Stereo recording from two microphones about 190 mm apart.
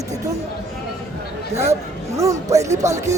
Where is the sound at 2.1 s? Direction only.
15° right (ahead or behind).